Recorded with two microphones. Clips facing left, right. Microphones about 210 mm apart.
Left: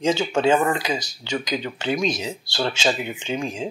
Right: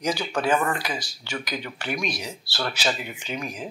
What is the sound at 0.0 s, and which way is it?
Speech, 25° left (ahead or behind).